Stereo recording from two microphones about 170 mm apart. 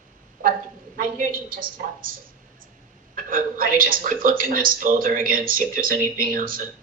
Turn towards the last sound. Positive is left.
turn(degrees=-55)  # may be behind; listen again after turning